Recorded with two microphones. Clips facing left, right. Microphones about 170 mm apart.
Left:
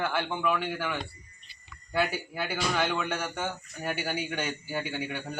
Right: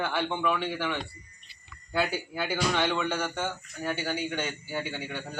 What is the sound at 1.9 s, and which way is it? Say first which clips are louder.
A man's voice: even; centre (ahead or behind).